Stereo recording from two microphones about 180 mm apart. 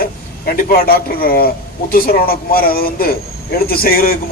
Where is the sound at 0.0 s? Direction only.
55° left (ahead or behind).